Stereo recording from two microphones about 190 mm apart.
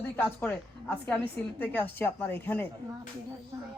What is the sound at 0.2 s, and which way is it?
Speech, 10° left (ahead or behind).